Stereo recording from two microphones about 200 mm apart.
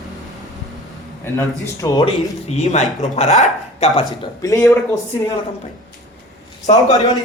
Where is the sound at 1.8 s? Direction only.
20° left (ahead or behind).